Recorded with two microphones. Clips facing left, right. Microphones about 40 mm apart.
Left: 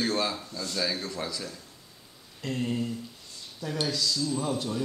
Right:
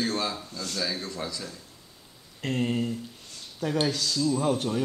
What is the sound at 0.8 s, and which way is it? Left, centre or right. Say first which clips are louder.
Speech: left 1 dB; centre.